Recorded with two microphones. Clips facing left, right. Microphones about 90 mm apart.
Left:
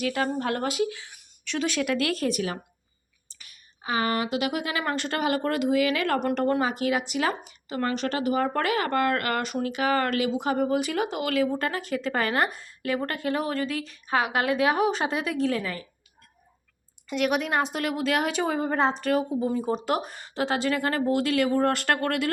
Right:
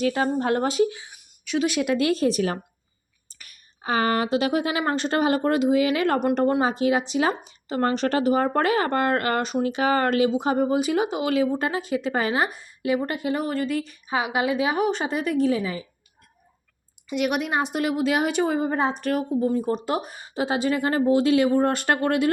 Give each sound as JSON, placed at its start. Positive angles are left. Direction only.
{"t": 0.0, "sound": "a woman's voice", "side_deg": -25}
{"t": 0.9, "sound": "speech", "side_deg": -15}
{"t": 1.8, "sound": "a woman's voice", "side_deg": -20}
{"t": 2.3, "sound": "a woman's voice", "side_deg": -35}
{"t": 3.2, "sound": "a woman's voice", "side_deg": -50}
{"t": 7.8, "sound": "a woman's voice", "side_deg": -40}
{"t": 17.1, "sound": "a woman's voice", "side_deg": 0}
{"t": 20.1, "sound": "a woman's voice", "side_deg": -10}